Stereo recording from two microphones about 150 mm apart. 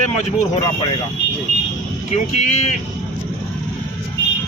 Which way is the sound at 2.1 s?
50° left (ahead or behind).